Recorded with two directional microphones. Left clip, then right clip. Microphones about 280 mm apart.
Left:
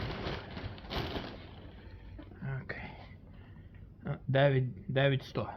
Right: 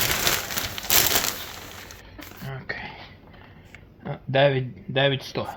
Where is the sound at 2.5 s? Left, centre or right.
Right.